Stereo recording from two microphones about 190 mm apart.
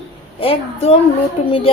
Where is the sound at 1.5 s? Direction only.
30° left (ahead or behind).